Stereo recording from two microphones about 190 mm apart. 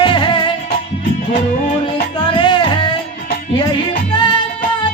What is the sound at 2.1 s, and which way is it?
Music, 25° left (ahead or behind).